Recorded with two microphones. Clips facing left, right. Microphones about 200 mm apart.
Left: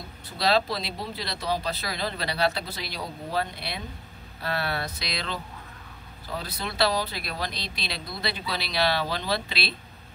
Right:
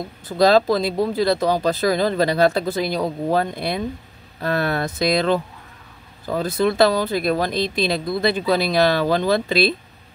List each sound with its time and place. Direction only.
0.3 s speech: 45° right (ahead or behind)